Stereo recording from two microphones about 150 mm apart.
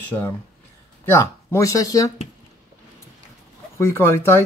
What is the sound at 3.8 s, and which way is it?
Speech, 15° left (ahead or behind).